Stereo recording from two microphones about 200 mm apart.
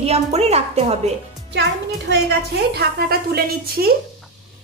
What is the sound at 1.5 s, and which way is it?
A child's voice, 60° right (ahead or behind).